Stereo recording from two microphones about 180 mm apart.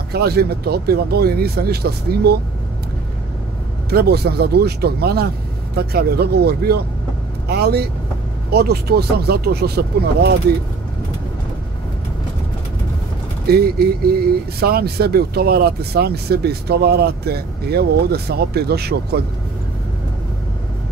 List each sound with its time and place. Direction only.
0.1 s speech: 60° right (ahead or behind)
3.9 s speech: 60° right (ahead or behind)
13.5 s speech: 60° right (ahead or behind)